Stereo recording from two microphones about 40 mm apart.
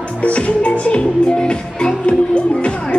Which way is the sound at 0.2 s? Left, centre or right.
Left.